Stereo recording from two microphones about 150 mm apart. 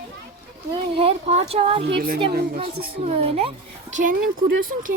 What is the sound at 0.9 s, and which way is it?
A woman's voice, 40° right (ahead or behind).